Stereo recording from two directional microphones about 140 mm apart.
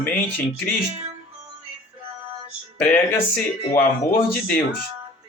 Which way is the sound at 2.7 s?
10° left (ahead or behind).